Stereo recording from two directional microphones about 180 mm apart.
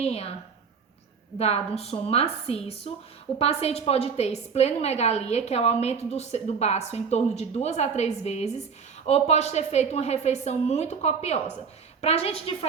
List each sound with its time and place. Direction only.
0.0 s a woman's voice: 35° left (ahead or behind)
1.4 s a woman's voice: 35° left (ahead or behind)